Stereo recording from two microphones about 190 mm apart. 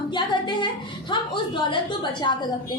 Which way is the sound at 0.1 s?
25° left (ahead or behind).